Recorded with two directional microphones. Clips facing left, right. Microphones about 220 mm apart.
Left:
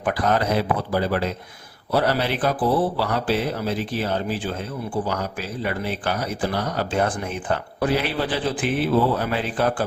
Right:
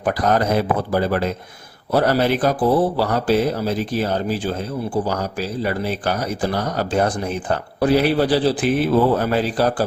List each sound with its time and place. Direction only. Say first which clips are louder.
0.0 s a man's voice: right 3 dB; 40° right (ahead or behind)